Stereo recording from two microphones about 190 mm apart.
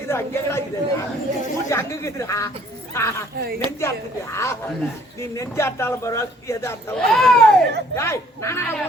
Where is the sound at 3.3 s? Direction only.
55° right (ahead or behind).